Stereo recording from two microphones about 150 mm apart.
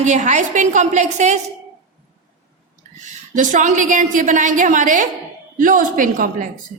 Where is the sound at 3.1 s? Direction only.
55° right (ahead or behind).